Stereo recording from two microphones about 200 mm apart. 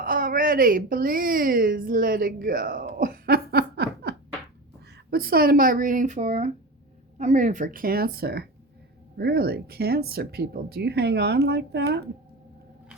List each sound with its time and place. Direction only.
0.0 s a woman's voice: 45° right (ahead or behind)
5.1 s speech: 50° right (ahead or behind)